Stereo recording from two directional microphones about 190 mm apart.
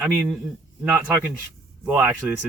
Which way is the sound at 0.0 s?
5° right (ahead or behind).